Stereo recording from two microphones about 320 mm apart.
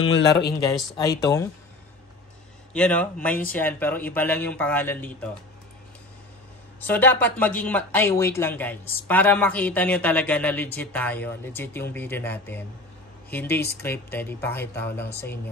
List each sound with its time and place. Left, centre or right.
0.1 s speech: left
0.9 s speech: centre
2.7 s speech: centre
6.9 s speech: centre